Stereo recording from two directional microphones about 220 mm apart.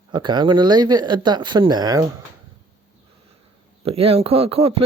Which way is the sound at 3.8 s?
25° right (ahead or behind).